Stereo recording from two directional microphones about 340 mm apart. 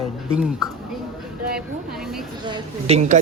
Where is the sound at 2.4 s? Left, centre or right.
Centre.